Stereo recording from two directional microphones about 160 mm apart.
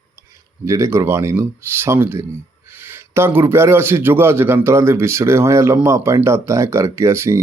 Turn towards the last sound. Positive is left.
turn(degrees=-15)  # may be behind; listen again after turning